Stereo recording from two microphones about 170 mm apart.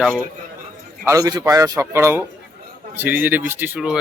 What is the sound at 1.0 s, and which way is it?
Speech, 20° right (ahead or behind).